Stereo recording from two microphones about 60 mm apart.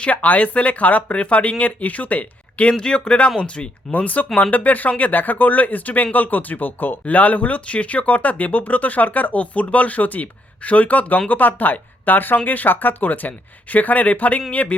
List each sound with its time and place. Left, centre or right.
0.0 s speech: left